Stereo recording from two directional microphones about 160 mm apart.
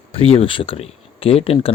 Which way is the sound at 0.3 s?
35° left (ahead or behind).